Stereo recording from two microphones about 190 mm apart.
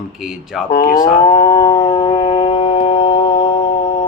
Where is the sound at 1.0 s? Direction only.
20° left (ahead or behind).